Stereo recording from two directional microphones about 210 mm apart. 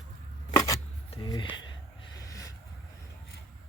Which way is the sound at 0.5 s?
15° left (ahead or behind).